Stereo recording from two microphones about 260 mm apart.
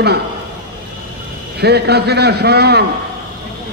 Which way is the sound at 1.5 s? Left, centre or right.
Right.